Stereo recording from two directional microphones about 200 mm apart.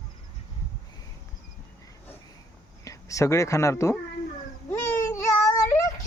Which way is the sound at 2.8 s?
15° left (ahead or behind).